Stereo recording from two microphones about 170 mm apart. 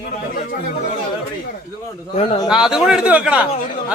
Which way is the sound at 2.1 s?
35° left (ahead or behind).